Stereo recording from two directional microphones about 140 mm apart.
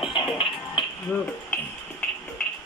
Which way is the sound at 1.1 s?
10° left (ahead or behind).